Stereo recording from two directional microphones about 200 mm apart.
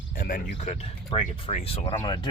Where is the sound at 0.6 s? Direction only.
35° left (ahead or behind).